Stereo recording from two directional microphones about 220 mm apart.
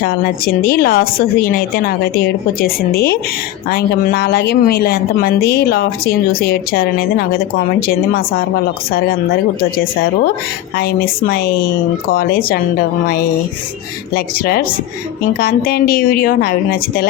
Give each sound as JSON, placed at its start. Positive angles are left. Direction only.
{"t": 0.0, "sound": "speech", "side_deg": 40}
{"t": 10.8, "sound": "speech", "side_deg": 45}
{"t": 14.1, "sound": "speech", "side_deg": 45}